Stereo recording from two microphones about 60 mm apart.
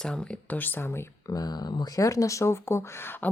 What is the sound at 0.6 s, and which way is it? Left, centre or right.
Speech, left.